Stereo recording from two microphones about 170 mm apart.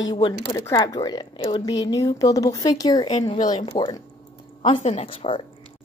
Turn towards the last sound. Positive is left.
turn(degrees=35)  # may be behind; listen again after turning